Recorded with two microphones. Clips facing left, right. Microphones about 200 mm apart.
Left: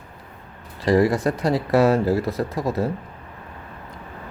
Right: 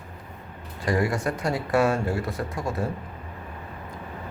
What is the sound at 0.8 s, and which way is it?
Speech, 35° left (ahead or behind).